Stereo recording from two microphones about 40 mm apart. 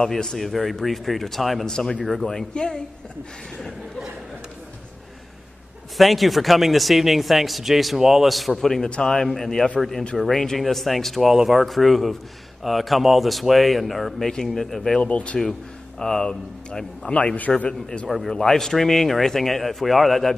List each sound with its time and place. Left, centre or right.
0.0 s speech: centre
1.7 s speech: centre
2.0 s speech: centre
2.5 s speech: centre
5.9 s speech: centre
8.6 s speech: centre
14.2 s speech: centre
15.0 s speech: left
16.0 s speech: centre
18.0 s speech: centre